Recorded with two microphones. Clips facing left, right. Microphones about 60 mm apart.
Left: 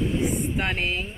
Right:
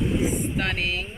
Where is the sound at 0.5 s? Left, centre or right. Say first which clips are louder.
Even; centre.